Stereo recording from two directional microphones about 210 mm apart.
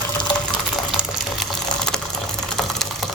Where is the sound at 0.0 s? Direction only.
5° left (ahead or behind).